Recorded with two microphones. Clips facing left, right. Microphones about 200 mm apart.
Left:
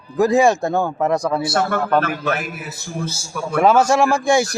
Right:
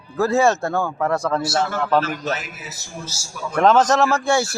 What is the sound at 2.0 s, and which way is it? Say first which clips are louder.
A man's voice: left 2 dB; 55° left (ahead or behind).